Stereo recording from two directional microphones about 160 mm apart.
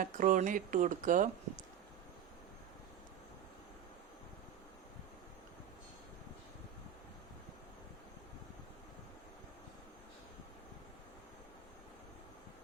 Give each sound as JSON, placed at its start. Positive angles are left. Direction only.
{"t": 0.0, "sound": "speech", "side_deg": -55}